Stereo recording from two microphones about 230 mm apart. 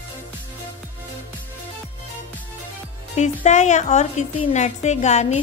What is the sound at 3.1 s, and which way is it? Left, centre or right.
A woman's voice, left.